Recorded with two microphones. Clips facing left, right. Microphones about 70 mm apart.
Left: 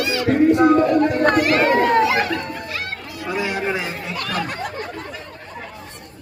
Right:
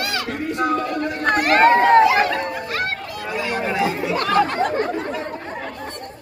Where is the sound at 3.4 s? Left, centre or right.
Centre.